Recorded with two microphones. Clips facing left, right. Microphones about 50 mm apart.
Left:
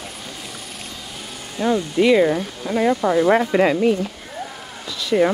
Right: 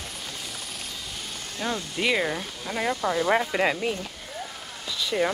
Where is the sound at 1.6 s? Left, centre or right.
Centre.